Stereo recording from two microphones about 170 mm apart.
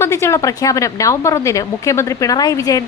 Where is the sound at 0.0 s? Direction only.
15° left (ahead or behind).